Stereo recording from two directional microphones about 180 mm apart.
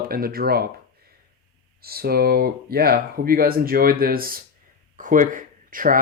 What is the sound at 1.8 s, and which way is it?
Speech, 60° right (ahead or behind).